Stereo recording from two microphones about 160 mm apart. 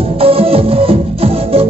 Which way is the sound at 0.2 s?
35° right (ahead or behind).